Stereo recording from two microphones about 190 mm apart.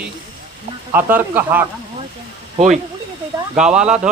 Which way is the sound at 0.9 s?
10° right (ahead or behind).